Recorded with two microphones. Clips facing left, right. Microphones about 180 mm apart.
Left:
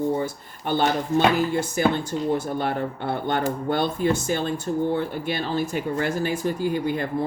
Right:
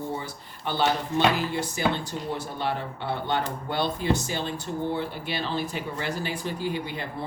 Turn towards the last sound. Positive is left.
turn(degrees=45)  # may be behind; listen again after turning